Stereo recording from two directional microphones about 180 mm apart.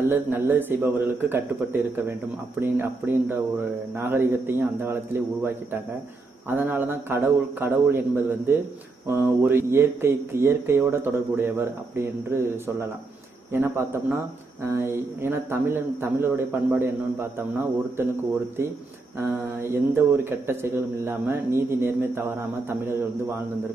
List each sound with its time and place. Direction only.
0.1 s speech: 10° right (ahead or behind)
19.1 s speech: 15° right (ahead or behind)